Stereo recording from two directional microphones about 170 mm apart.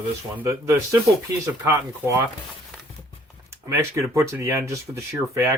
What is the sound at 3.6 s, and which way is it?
Speech, 20° right (ahead or behind).